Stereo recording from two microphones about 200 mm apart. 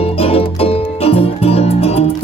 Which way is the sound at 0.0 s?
30° left (ahead or behind).